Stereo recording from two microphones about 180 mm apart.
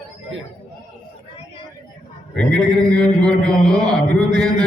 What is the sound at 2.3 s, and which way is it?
A man's voice, 5° left (ahead or behind).